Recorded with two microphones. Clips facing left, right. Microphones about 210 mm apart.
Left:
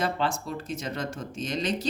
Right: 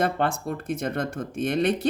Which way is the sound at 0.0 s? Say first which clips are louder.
Right 4 dB; 55° right (ahead or behind).